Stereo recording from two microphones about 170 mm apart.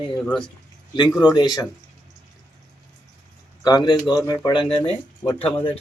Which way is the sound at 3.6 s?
25° left (ahead or behind).